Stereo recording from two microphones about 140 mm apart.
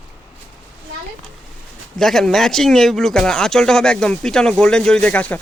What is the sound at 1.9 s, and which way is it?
Speech, 5° left (ahead or behind).